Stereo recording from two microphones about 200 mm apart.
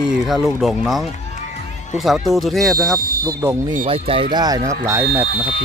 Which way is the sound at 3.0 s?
45° right (ahead or behind).